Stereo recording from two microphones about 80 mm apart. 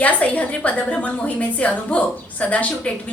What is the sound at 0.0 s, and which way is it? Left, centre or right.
A woman's voice, centre.